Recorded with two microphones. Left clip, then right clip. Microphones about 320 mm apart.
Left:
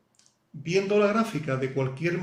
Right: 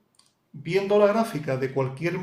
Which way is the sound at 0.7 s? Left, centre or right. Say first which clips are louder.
Right 3 dB; right.